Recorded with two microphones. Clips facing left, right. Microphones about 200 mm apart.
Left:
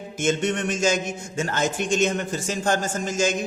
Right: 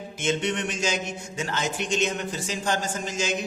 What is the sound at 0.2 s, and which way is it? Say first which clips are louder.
Speech: left 3 dB; 45° left (ahead or behind).